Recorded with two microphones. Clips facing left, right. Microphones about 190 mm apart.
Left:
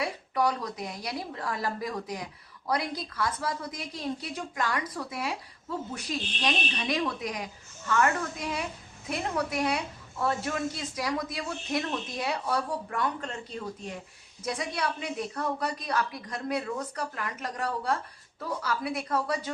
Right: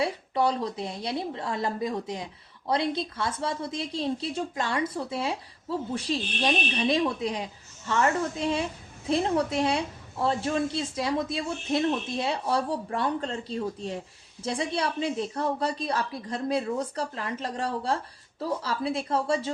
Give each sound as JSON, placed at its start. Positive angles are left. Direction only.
{"t": 0.0, "sound": "a woman's voice", "side_deg": -25}